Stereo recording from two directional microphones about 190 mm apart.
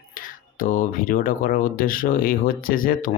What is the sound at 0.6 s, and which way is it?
Speech, 45° left (ahead or behind).